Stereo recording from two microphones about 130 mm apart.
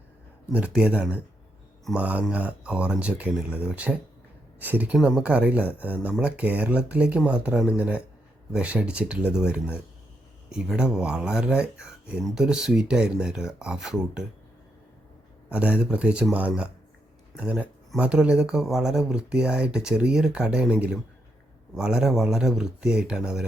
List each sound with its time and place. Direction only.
0.5 s a man's voice: 10° right (ahead or behind)
15.4 s speech: 10° right (ahead or behind)